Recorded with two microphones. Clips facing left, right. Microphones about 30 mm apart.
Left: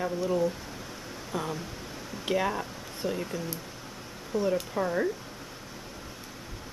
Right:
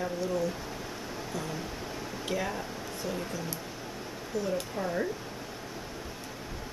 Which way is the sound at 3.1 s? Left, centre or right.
Centre.